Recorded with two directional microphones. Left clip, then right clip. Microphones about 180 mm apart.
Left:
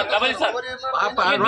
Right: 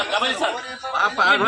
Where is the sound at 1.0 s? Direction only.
45° left (ahead or behind).